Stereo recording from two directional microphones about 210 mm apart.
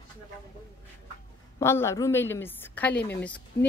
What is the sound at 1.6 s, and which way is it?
A woman's voice, 10° left (ahead or behind).